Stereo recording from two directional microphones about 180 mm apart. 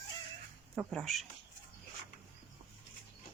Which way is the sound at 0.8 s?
Centre (ahead or behind).